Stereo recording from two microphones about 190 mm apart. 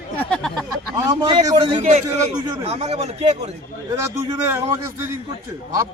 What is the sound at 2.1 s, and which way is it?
Speech, 20° right (ahead or behind).